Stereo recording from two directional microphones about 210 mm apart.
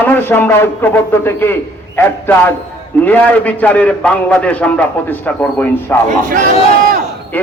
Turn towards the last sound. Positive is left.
turn(degrees=10)  # may be behind; listen again after turning